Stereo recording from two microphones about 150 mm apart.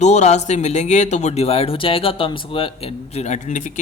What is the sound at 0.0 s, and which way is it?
A man's voice, 50° left (ahead or behind).